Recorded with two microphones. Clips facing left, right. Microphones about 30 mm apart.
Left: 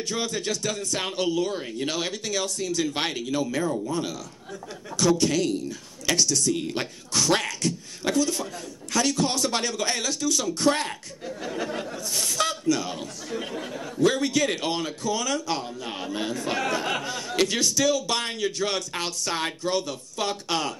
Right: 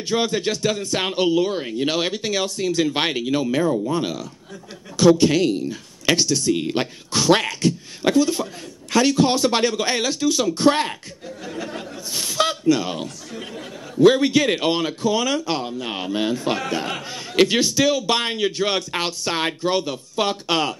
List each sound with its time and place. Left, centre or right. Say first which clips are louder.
0.1 s a man's voice: right 8 dB; right
11.4 s speech: even; centre
12.1 s a man's voice: right 5 dB; right
13.3 s speech: left 2 dB; centre
14.0 s a man's voice: right 7 dB; right